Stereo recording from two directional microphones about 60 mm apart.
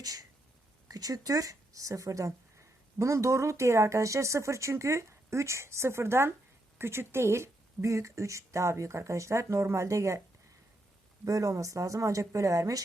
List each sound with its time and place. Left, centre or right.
0.0 s a sound: right
0.9 s speech: right
11.3 s speech: right